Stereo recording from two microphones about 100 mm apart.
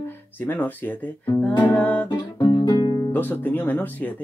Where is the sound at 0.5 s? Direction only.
20° left (ahead or behind).